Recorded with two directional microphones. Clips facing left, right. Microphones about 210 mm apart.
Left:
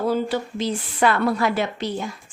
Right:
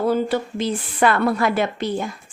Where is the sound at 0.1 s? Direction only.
55° right (ahead or behind).